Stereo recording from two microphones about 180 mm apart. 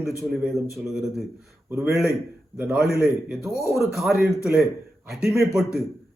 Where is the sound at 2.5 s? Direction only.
10° right (ahead or behind).